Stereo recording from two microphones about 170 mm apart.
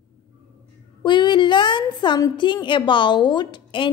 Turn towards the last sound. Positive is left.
turn(degrees=30)  # may be behind; listen again after turning